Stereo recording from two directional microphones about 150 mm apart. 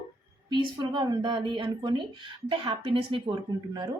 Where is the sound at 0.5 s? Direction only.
30° right (ahead or behind).